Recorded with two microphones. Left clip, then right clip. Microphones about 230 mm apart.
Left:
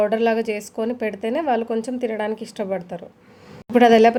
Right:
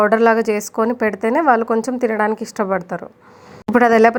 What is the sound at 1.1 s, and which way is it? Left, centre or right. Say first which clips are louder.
A woman's voice: right 8 dB; centre.